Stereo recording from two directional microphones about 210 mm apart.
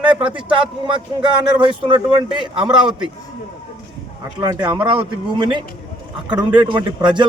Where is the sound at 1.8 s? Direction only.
20° right (ahead or behind).